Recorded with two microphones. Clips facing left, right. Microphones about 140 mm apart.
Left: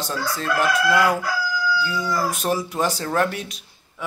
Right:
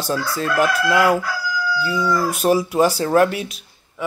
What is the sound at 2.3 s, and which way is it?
Speech, 10° right (ahead or behind).